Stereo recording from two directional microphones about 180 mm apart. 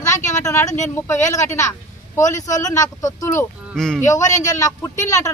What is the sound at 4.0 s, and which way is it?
Speech, 15° left (ahead or behind).